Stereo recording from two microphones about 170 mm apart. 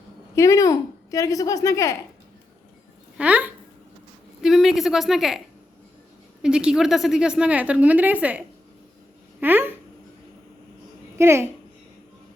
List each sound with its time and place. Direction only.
0.3 s a woman's voice: 20° left (ahead or behind)
3.2 s a woman's voice: 10° right (ahead or behind)
6.4 s a woman's voice: 5° right (ahead or behind)
11.2 s a woman's voice: 15° right (ahead or behind)